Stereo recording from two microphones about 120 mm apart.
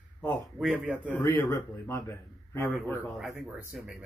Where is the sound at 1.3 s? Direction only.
25° left (ahead or behind).